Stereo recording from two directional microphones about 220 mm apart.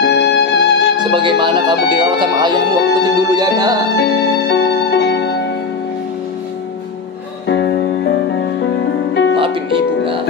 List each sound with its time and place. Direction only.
0.0 s music: 50° left (ahead or behind)
0.9 s speech: 20° right (ahead or behind)
3.0 s music: 15° right (ahead or behind)
3.9 s music: 50° left (ahead or behind)
7.4 s music: 50° left (ahead or behind)